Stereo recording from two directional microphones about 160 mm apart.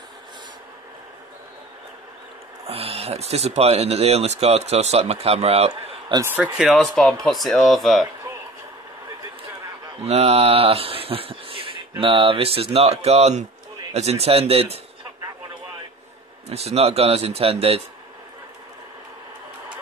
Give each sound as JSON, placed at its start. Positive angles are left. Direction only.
{"t": 2.6, "sound": "speech", "side_deg": -40}
{"t": 5.9, "sound": "a sound", "side_deg": -30}
{"t": 6.2, "sound": "speech", "side_deg": -10}
{"t": 10.0, "sound": "speech", "side_deg": -40}
{"t": 16.4, "sound": "speech", "side_deg": -40}